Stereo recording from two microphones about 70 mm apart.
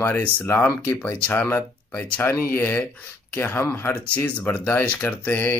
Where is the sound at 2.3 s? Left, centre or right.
Left.